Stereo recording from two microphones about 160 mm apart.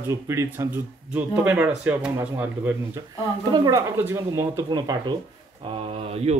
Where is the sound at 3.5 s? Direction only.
25° right (ahead or behind).